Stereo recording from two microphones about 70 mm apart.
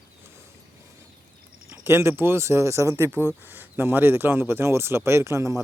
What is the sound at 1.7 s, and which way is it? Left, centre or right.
Speech, right.